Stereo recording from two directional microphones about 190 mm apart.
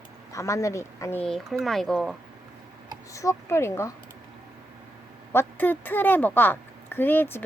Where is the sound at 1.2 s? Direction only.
Centre (ahead or behind).